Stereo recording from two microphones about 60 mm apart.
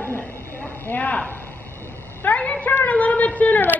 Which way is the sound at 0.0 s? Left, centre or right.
Left.